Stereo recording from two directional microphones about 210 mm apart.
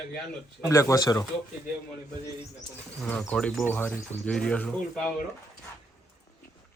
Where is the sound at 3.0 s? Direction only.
10° left (ahead or behind).